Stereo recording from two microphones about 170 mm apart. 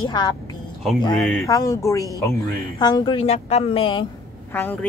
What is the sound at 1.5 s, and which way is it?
A woman's voice, 20° left (ahead or behind).